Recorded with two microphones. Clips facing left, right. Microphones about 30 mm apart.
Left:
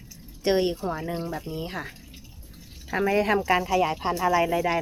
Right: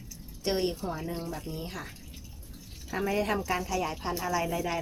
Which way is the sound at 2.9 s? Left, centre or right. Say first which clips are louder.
Left 6 dB; left.